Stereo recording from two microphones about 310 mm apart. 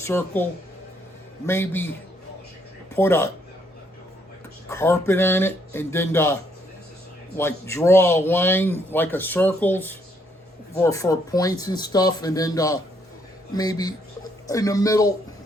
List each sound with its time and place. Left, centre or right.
0.0 s speech: centre
1.5 s speech: centre
4.7 s speech: centre